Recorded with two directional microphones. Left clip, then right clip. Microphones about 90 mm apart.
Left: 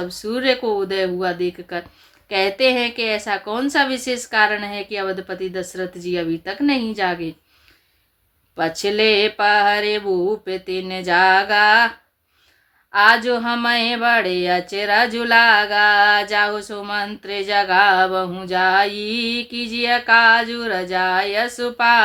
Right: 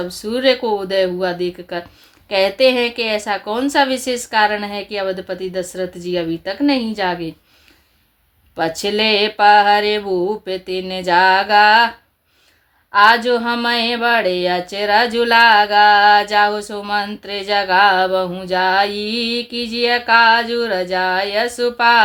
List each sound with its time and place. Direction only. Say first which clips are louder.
0.0 s speech: right 4 dB; 35° right (ahead or behind)
8.5 s speech: right 1 dB; 40° right (ahead or behind)
12.9 s speech: right 3 dB; 40° right (ahead or behind)